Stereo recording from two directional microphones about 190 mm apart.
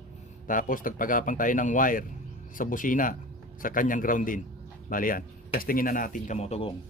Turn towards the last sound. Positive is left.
turn(degrees=35)  # may be behind; listen again after turning